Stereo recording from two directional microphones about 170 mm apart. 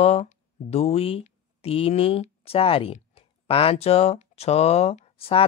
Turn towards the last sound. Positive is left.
turn(degrees=35)  # may be behind; listen again after turning